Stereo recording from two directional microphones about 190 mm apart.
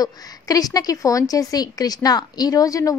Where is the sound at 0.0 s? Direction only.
20° left (ahead or behind).